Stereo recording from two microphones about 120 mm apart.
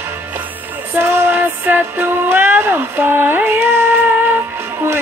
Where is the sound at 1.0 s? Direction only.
20° right (ahead or behind).